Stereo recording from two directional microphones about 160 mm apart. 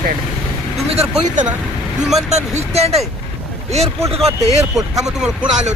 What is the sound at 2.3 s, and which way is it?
Speech, 45° right (ahead or behind).